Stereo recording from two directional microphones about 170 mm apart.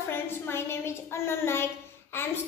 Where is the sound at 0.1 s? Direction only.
15° left (ahead or behind).